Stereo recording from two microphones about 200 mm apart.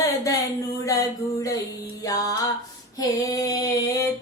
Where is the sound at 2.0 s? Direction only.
15° left (ahead or behind).